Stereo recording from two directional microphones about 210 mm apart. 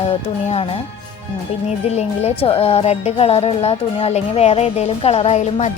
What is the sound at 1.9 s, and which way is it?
Speech, 30° left (ahead or behind).